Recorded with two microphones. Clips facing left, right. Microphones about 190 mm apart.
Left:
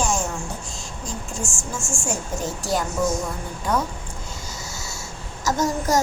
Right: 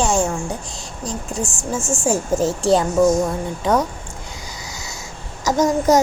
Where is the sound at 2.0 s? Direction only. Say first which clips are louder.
Right 10 dB; 90° right.